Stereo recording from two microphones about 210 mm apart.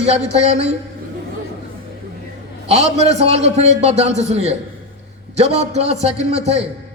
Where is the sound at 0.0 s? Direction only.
30° right (ahead or behind).